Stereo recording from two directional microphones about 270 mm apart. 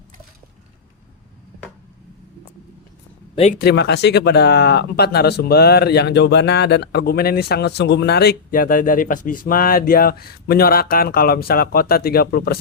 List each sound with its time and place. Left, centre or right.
3.6 s speech: left